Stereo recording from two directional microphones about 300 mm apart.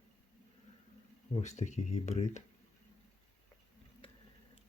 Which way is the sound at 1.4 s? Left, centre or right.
Left.